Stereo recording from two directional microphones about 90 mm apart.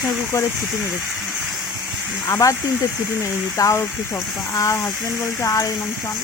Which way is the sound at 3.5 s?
40° left (ahead or behind).